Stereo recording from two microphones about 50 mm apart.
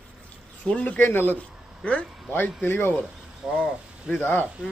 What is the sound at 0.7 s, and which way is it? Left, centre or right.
Speech, left.